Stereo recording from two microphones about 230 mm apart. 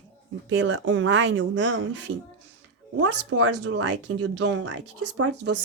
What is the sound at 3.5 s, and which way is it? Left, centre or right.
Speech, right.